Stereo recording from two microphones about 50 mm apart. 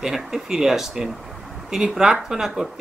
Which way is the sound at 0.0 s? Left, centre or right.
Centre.